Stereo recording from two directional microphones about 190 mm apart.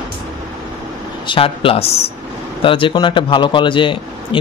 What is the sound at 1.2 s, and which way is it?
Speech, 30° left (ahead or behind).